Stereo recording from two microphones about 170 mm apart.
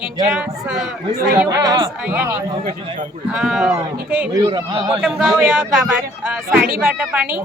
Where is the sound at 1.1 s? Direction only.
55° right (ahead or behind).